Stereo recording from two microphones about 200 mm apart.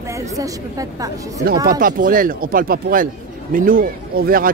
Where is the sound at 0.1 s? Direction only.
15° right (ahead or behind).